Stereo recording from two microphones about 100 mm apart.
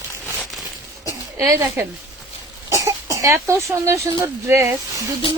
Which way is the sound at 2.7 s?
30° right (ahead or behind).